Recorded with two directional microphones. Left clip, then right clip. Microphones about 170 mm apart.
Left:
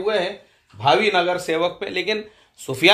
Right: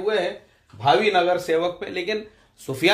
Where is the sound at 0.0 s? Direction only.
25° left (ahead or behind).